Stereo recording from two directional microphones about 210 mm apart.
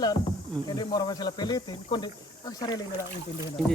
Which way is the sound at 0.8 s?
20° left (ahead or behind).